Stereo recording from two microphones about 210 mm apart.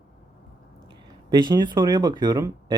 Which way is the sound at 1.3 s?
20° right (ahead or behind).